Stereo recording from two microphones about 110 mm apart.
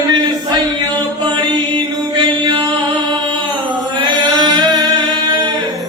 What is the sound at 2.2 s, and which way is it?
Chant, 40° right (ahead or behind).